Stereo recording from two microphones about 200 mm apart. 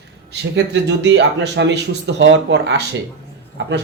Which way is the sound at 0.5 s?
60° right (ahead or behind).